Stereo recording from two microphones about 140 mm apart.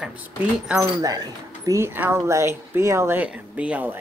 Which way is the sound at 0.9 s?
25° right (ahead or behind).